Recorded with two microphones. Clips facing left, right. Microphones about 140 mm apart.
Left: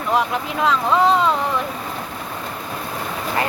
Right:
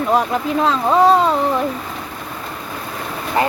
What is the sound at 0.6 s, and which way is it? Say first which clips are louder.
Speech: right 2 dB; 40° right (ahead or behind).